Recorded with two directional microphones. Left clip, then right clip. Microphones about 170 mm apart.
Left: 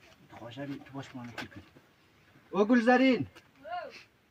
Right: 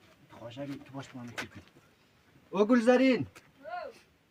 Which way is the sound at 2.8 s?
5° right (ahead or behind).